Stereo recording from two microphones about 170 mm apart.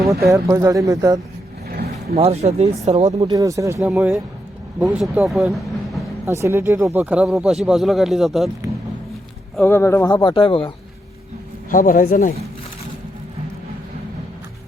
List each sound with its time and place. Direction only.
0.3 s speech: 20° right (ahead or behind)
2.1 s speech: 35° right (ahead or behind)
3.2 s speech: 20° right (ahead or behind); by 5.6 s centre (ahead or behind)
6.2 s speech: 15° right (ahead or behind)
9.6 s speech: 15° left (ahead or behind); by 10.7 s 30° left (ahead or behind)
11.7 s speech: 50° left (ahead or behind)